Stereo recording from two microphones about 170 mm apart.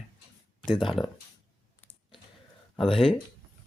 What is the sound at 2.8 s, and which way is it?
Speech, centre (ahead or behind).